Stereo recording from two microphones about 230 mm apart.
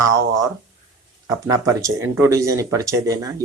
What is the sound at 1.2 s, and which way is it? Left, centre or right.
Speech, centre.